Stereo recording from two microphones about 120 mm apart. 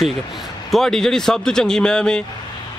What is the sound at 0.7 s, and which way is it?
Speech, 5° left (ahead or behind).